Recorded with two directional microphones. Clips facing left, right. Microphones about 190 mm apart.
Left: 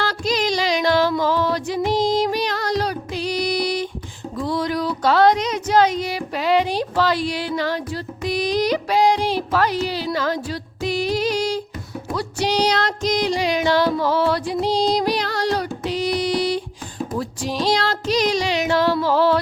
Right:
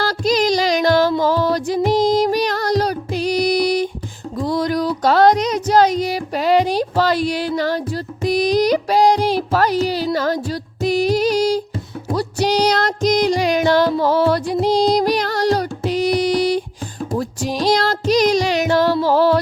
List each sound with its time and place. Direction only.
0.0 s music: 40° right (ahead or behind)
4.4 s a sound: 40° right (ahead or behind)
12.0 s music: 40° right (ahead or behind)
17.6 s music: 40° right (ahead or behind)